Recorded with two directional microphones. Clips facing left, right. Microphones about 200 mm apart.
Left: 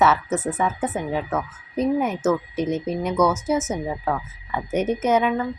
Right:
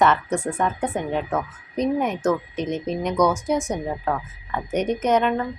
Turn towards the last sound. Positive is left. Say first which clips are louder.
# even
turn(degrees=5)  # may be behind; listen again after turning